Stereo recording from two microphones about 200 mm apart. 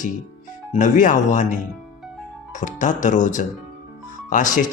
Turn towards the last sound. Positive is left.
turn(degrees=40)  # may be behind; listen again after turning